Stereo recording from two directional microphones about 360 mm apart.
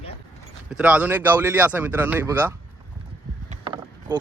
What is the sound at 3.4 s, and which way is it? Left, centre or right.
Rowboat, centre.